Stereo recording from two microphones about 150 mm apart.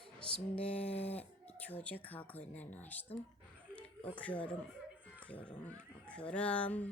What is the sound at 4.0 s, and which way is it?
Speech, 35° left (ahead or behind).